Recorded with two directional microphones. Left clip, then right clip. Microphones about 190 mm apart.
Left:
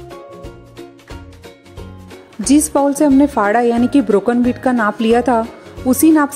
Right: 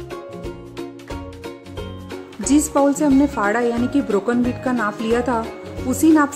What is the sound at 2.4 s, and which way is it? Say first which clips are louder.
A woman's voice: left 3 dB; 35° left (ahead or behind).